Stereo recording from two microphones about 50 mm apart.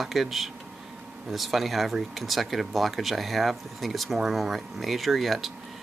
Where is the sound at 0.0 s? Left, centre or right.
Centre.